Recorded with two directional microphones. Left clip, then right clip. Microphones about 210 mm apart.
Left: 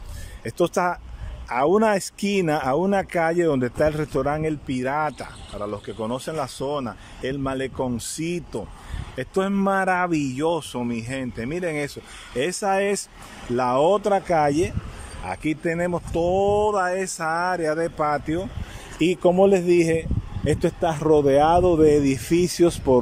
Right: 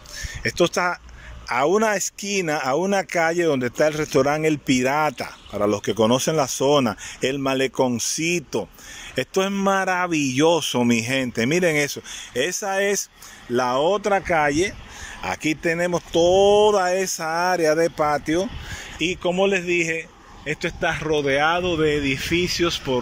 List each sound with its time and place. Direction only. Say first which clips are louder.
0.4 s speech: right 2 dB; 15° left (ahead or behind)
13.8 s speech: even; 15° left (ahead or behind)
15.2 s speech: right 3 dB; centre (ahead or behind)
18.9 s speech: left 4 dB; 20° left (ahead or behind)